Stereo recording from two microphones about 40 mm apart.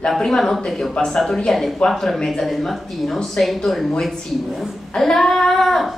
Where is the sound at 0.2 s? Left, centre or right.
Centre.